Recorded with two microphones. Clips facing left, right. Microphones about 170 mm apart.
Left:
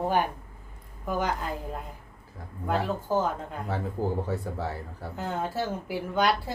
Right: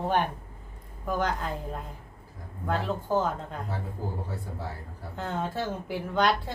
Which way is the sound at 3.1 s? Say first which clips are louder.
Even; 10° left (ahead or behind).